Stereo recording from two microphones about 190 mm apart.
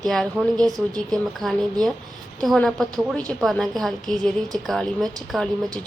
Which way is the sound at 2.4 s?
Centre (ahead or behind).